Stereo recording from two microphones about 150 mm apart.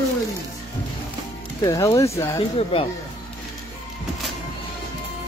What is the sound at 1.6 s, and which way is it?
Speech, 25° left (ahead or behind).